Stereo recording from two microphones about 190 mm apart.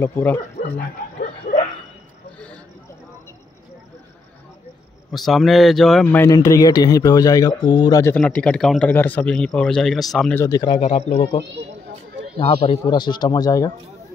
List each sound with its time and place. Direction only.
0.0 s speech: 10° left (ahead or behind)
0.7 s bow-wow: 40° left (ahead or behind)
2.3 s a sound: 5° left (ahead or behind)
5.1 s speech: centre (ahead or behind); by 8.2 s 15° left (ahead or behind)
8.2 s speech: 5° left (ahead or behind)
10.4 s speech: 20° left (ahead or behind)
10.8 s a man's voice: 35° left (ahead or behind); by 13.7 s 20° left (ahead or behind)